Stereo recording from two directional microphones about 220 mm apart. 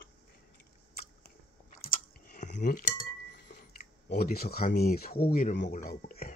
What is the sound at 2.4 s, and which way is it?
Cutlery, 35° left (ahead or behind).